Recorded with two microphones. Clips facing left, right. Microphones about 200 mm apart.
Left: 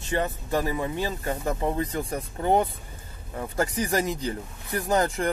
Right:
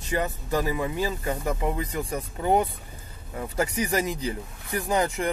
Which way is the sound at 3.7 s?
35° left (ahead or behind).